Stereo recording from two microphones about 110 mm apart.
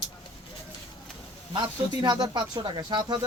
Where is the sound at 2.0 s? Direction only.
40° right (ahead or behind).